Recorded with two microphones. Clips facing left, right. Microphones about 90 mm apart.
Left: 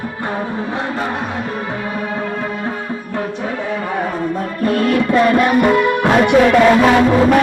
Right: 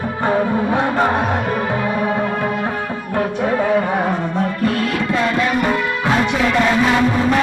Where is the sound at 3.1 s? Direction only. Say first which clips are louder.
Right 5 dB; 55° right (ahead or behind).